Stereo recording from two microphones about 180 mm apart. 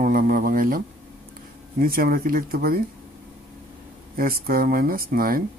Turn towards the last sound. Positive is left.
turn(degrees=-55)  # may be behind; listen again after turning